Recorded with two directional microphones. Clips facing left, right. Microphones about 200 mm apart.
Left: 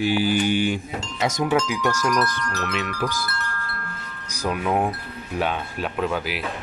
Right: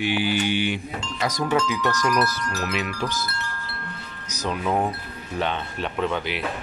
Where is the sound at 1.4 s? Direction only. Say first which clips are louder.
Even; 10° left (ahead or behind).